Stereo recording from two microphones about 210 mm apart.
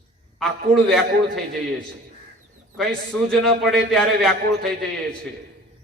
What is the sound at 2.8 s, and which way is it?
A man's voice, centre (ahead or behind).